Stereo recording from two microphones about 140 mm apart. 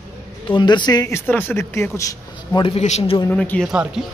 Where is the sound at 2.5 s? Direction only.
40° left (ahead or behind).